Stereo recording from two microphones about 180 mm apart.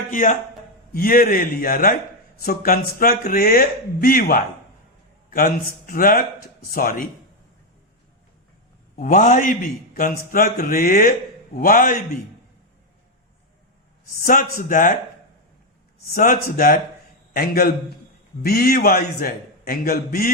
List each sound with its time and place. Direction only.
0.1 s a man's voice: 45° left (ahead or behind)
9.0 s a man's voice: 45° left (ahead or behind)
14.6 s a man's voice: 50° left (ahead or behind)
16.1 s a man's voice: 50° left (ahead or behind)